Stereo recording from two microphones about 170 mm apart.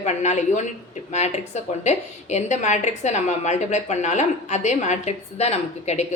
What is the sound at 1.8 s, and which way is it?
A woman's voice, 40° left (ahead or behind).